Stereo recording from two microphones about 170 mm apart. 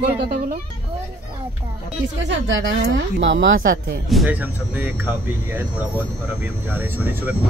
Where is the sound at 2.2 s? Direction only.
90° right.